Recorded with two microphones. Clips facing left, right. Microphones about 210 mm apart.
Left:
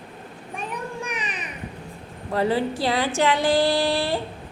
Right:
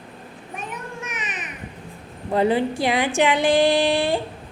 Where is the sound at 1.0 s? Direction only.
5° right (ahead or behind).